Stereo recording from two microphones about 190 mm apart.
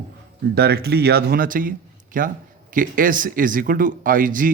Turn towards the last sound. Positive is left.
turn(degrees=-45)  # may be behind; listen again after turning